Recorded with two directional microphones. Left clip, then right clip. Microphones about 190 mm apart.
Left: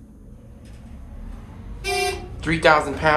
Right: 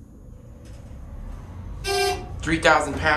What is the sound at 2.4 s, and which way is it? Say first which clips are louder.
Speech: left 2 dB; 15° right (ahead or behind).